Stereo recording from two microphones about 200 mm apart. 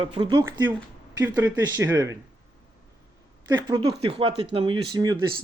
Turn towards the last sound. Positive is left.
turn(degrees=-20)  # may be behind; listen again after turning